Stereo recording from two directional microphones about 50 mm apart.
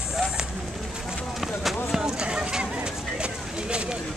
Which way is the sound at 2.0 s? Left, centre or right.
Centre.